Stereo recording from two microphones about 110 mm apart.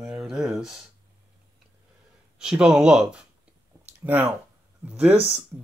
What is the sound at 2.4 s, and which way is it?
Speech, 5° right (ahead or behind).